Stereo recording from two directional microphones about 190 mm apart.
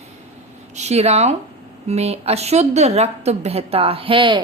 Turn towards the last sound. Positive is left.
turn(degrees=-25)  # may be behind; listen again after turning